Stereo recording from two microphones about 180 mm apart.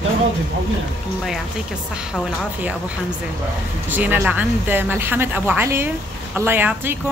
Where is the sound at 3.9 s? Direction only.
10° right (ahead or behind).